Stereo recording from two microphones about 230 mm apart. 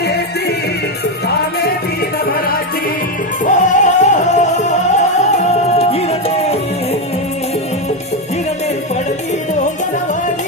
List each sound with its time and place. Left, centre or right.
0.0 s music: left
3.4 s music: left